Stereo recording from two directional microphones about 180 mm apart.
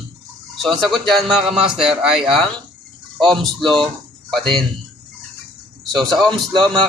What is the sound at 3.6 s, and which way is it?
Speech, centre (ahead or behind).